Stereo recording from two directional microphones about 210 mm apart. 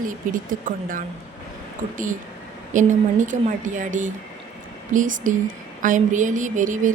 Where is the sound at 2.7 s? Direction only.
35° right (ahead or behind).